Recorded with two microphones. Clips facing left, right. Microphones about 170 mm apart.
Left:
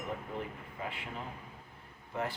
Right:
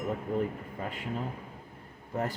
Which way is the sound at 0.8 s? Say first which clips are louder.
Right 2 dB; 45° right (ahead or behind).